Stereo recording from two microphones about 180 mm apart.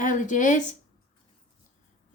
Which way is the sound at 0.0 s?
45° left (ahead or behind).